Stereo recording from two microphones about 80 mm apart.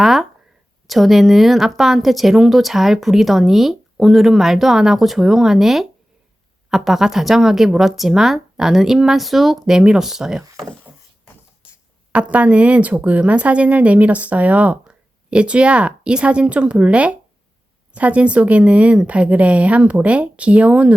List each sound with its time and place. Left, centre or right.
0.0 s speech: centre
12.1 s speech: centre